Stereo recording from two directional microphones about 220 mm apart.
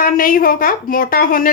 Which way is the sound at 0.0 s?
40° left (ahead or behind).